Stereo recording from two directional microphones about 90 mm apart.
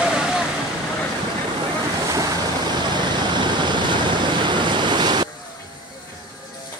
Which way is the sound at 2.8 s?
55° right (ahead or behind).